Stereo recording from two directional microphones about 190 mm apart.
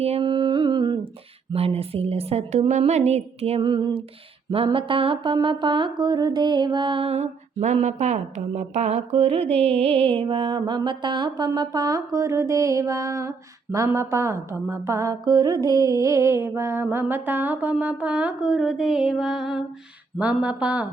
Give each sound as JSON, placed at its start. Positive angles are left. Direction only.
{"t": 0.0, "sound": "music", "side_deg": -30}
{"t": 1.5, "sound": "a woman's voice", "side_deg": -30}
{"t": 4.5, "sound": "mantra", "side_deg": -30}
{"t": 13.7, "sound": "a woman's voice", "side_deg": -15}